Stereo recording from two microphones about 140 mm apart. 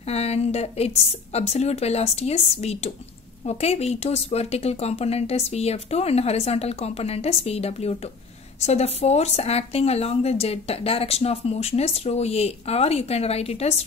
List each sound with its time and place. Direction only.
0.0 s speech: 50° left (ahead or behind)